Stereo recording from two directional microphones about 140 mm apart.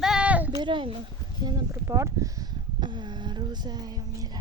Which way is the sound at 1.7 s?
20° right (ahead or behind).